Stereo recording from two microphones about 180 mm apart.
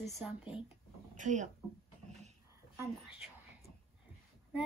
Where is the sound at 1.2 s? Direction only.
40° right (ahead or behind).